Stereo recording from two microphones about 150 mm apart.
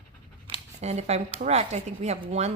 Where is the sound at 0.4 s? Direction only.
45° right (ahead or behind).